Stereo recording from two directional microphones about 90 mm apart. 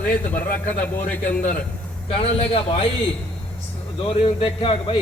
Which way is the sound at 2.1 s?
90° left.